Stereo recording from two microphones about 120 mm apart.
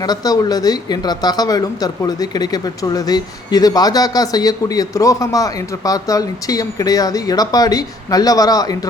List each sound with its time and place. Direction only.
0.0 s speech: 35° left (ahead or behind)